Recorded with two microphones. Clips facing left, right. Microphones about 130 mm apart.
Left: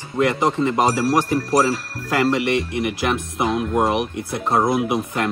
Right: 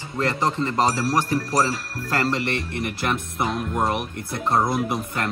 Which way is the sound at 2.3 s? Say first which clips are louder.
Left 6 dB; 15° left (ahead or behind).